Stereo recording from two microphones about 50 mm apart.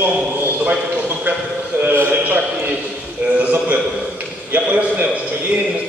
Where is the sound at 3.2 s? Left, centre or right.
Right.